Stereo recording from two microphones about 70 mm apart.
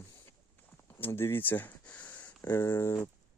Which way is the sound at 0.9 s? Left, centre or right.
Left.